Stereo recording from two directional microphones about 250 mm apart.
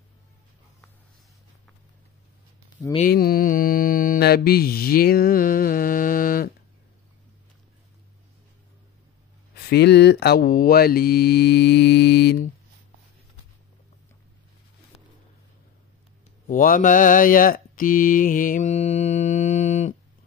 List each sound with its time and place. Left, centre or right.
3.0 s mantra: left
9.7 s speech: left
16.4 s mantra: left